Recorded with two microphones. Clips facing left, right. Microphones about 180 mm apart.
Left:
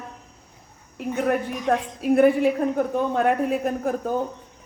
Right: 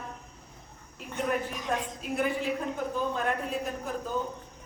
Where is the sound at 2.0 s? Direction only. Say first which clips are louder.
Left 15 dB; 60° left (ahead or behind).